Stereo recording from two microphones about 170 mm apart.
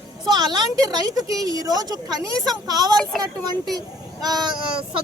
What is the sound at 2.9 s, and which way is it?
Speech, 5° left (ahead or behind).